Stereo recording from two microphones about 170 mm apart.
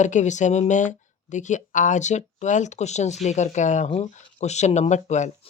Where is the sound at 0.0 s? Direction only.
45° left (ahead or behind).